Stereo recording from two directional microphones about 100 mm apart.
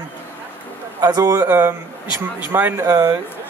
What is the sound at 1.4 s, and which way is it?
Speech, 25° right (ahead or behind).